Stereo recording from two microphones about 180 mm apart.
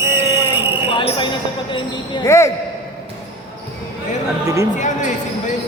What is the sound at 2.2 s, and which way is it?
Speech, 15° left (ahead or behind).